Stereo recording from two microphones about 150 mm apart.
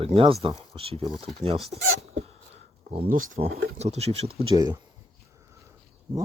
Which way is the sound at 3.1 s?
60° right (ahead or behind).